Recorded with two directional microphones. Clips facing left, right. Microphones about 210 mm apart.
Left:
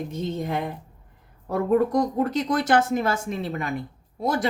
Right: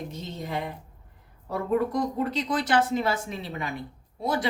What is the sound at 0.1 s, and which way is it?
Speech, 55° left (ahead or behind).